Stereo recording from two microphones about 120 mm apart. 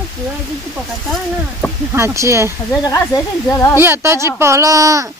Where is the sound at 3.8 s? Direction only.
20° right (ahead or behind).